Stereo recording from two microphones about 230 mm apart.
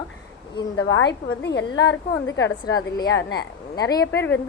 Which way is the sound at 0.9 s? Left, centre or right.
Left.